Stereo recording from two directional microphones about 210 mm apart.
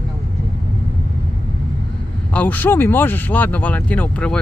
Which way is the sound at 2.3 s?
5° left (ahead or behind).